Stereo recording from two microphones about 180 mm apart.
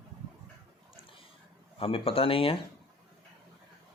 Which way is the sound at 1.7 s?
30° left (ahead or behind).